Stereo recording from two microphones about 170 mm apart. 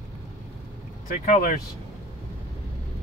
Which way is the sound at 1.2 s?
50° left (ahead or behind).